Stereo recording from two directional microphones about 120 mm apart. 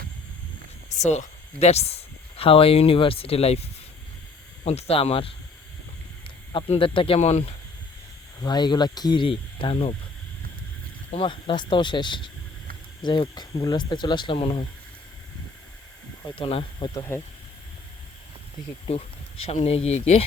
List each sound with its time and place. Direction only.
0.9 s speech: 75° left (ahead or behind); by 5.3 s 50° left (ahead or behind)
6.7 s speech: 45° left (ahead or behind)
7.2 s speech: 60° left (ahead or behind)
8.4 s speech: 35° left (ahead or behind)
11.1 s speech: 45° left (ahead or behind)
16.3 s speech: 50° left (ahead or behind)
17.1 s speech: 20° left (ahead or behind)
18.9 s speech: 55° left (ahead or behind)